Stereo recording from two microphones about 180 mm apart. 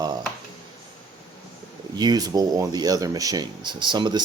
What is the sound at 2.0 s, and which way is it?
Speech, 20° right (ahead or behind).